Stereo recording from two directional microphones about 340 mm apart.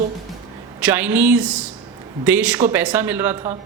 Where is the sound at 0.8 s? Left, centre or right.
Centre.